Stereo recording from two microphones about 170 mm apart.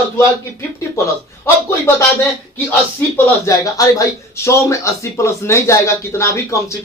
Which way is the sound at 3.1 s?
20° left (ahead or behind).